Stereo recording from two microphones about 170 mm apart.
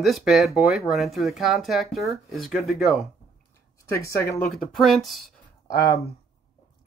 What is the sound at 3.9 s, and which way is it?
Speech, 15° left (ahead or behind).